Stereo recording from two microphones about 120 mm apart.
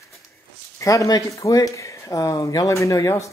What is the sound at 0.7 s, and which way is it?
Speech, 25° left (ahead or behind).